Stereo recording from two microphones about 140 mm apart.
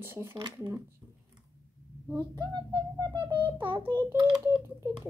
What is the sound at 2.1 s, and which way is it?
A child's voice, 30° right (ahead or behind).